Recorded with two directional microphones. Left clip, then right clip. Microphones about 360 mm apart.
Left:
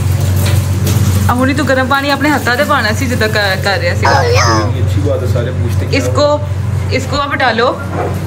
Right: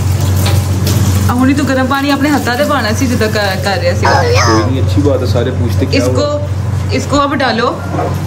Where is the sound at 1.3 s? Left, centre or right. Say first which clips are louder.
Left 1 dB; centre.